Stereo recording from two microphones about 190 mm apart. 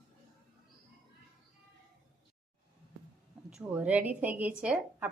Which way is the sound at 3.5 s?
5° right (ahead or behind).